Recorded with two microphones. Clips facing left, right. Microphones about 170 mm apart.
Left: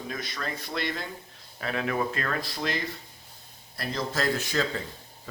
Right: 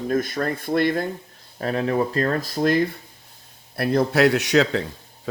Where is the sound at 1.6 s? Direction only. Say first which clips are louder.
Right 7 dB; 35° right (ahead or behind).